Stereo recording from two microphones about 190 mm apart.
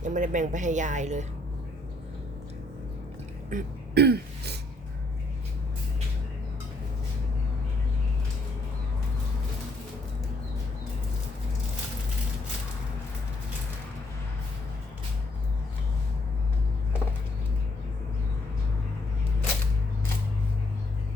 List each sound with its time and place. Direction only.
0.0 s speech: 40° right (ahead or behind)
3.5 s speech: 55° right (ahead or behind)